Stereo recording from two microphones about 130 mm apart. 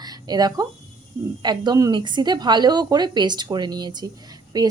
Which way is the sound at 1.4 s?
35° right (ahead or behind).